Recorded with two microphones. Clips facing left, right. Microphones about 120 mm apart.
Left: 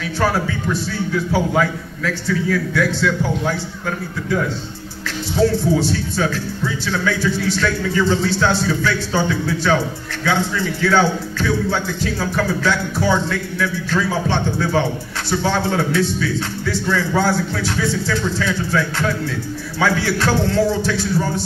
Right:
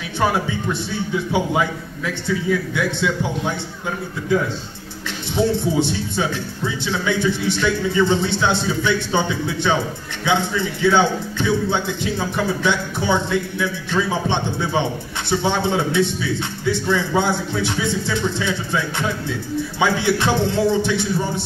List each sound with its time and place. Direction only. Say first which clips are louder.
0.2 s speech: even; 20° right (ahead or behind)
5.4 s speech: left 2 dB; 20° right (ahead or behind)